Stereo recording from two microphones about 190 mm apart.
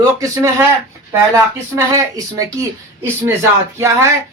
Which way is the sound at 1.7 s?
15° right (ahead or behind).